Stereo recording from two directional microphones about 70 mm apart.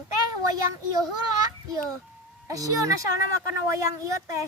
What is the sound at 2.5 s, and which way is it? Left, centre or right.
Speech, right.